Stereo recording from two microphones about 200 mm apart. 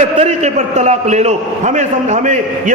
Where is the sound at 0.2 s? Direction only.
35° right (ahead or behind).